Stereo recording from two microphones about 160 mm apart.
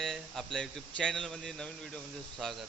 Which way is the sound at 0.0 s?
Centre (ahead or behind).